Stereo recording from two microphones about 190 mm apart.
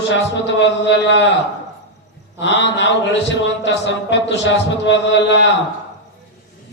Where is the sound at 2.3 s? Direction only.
70° left (ahead or behind).